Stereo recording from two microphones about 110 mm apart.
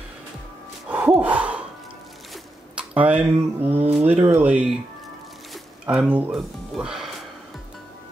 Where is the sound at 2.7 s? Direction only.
10° right (ahead or behind).